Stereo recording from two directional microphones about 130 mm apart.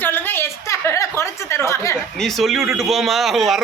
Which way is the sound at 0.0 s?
15° left (ahead or behind).